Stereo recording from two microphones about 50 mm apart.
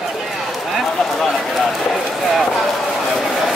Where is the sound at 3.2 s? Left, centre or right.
Centre.